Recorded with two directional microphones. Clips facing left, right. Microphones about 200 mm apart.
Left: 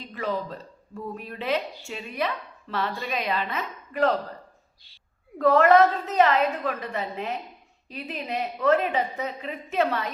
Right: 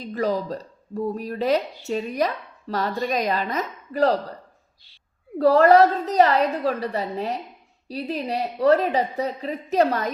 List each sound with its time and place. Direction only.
0.0 s speech: 40° right (ahead or behind)
5.4 s speech: 35° right (ahead or behind)